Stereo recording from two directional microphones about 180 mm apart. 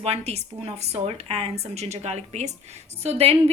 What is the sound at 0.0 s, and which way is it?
A woman's voice, 35° right (ahead or behind).